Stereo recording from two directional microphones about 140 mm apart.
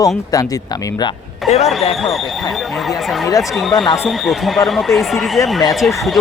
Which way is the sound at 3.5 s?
Centre (ahead or behind).